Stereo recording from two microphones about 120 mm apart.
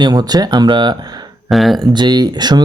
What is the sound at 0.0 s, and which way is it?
Speech, 35° right (ahead or behind).